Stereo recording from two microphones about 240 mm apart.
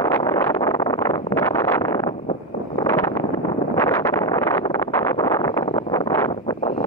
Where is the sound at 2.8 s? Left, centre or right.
Centre.